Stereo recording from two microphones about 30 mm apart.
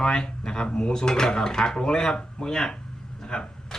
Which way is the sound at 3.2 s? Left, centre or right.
Left.